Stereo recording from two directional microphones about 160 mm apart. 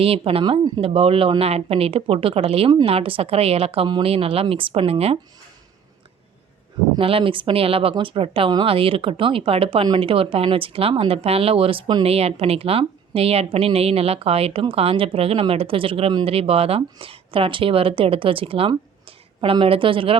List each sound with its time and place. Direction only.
0.0 s speech: 35° right (ahead or behind)
6.9 s speech: 35° right (ahead or behind)